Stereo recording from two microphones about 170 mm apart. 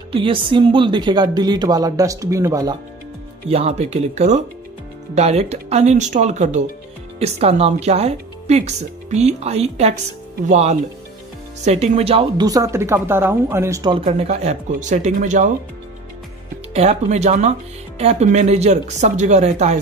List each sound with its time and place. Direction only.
0.1 s a woman's voice: 30° right (ahead or behind)
3.4 s speech: 40° right (ahead or behind)
12.4 s speech: 20° right (ahead or behind)
14.0 s speech: 40° right (ahead or behind)
16.7 s speech: 40° right (ahead or behind)